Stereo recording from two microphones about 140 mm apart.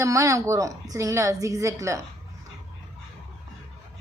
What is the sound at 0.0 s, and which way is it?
Speech, 20° right (ahead or behind).